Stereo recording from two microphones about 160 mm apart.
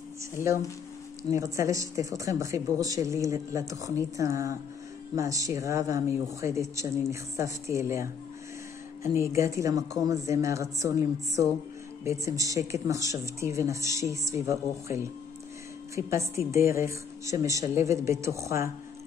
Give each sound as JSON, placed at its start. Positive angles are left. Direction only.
{"t": 0.4, "sound": "speech", "side_deg": 55}
{"t": 1.3, "sound": "a woman's voice", "side_deg": -20}
{"t": 9.3, "sound": "a woman's voice", "side_deg": -20}